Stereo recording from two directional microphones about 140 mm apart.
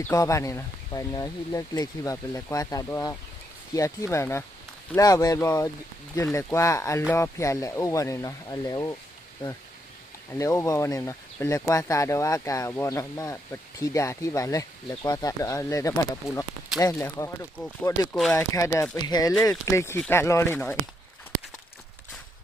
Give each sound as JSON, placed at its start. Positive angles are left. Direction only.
{"t": 0.0, "sound": "speech", "side_deg": 25}
{"t": 10.3, "sound": "speech", "side_deg": 20}
{"t": 18.1, "sound": "speech", "side_deg": 5}
{"t": 18.3, "sound": "speech", "side_deg": 25}